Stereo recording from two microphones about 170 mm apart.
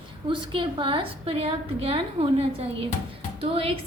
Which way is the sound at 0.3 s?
30° right (ahead or behind).